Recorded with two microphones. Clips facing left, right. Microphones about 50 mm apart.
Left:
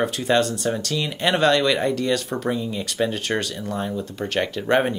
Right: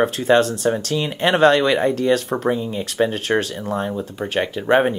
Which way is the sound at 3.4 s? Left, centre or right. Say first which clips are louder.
Right 2 dB; right.